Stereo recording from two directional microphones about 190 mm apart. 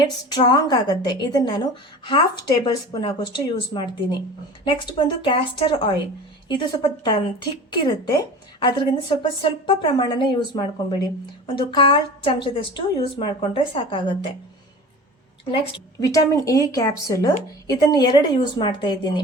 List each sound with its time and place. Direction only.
0.0 s a woman's voice: 20° left (ahead or behind)
15.4 s a woman's voice: 30° left (ahead or behind)
16.0 s a woman's voice: 15° left (ahead or behind)